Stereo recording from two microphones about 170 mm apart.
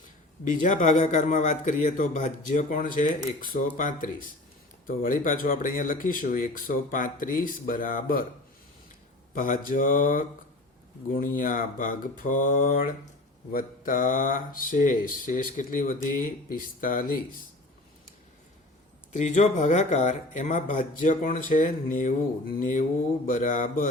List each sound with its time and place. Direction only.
0.5 s a man's voice: 50° left (ahead or behind)
9.3 s a man's voice: 55° left (ahead or behind)
19.1 s a man's voice: 45° left (ahead or behind)